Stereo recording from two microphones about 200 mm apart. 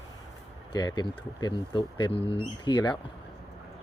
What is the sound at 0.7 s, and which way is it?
Speech, 20° left (ahead or behind).